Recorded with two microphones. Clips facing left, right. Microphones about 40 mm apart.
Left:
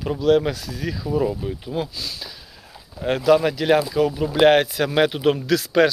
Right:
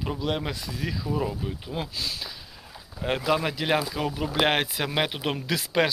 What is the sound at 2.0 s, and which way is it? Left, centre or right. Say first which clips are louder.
Speech: even; right.